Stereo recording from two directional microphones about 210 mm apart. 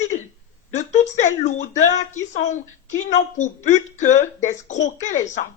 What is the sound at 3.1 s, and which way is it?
A woman's voice, 35° left (ahead or behind).